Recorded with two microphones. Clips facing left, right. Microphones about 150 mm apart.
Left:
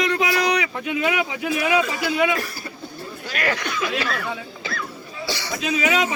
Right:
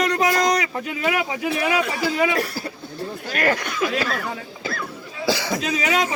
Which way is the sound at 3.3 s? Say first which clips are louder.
Right 2 dB; 45° right (ahead or behind).